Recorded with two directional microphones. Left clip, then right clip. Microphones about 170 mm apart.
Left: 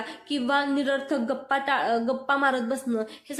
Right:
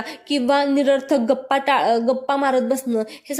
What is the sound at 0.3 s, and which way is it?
A woman's voice, 30° right (ahead or behind).